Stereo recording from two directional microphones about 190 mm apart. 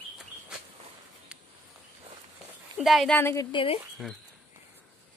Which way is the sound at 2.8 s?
Centre (ahead or behind).